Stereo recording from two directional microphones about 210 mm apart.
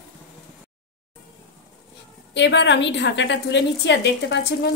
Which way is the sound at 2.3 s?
55° left (ahead or behind).